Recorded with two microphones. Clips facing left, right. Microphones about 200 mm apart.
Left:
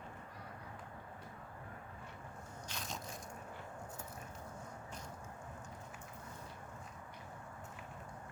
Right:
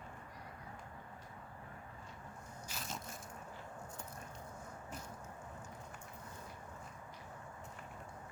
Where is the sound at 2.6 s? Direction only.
5° right (ahead or behind).